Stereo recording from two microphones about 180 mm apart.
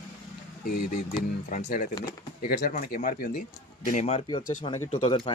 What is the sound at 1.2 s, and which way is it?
A man's voice, 50° left (ahead or behind).